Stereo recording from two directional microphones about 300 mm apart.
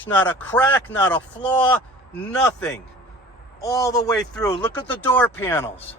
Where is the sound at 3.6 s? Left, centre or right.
Centre.